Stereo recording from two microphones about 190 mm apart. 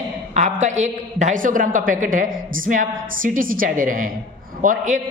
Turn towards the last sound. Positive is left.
turn(degrees=-40)  # may be behind; listen again after turning